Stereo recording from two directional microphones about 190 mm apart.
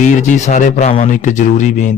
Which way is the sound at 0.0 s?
40° left (ahead or behind).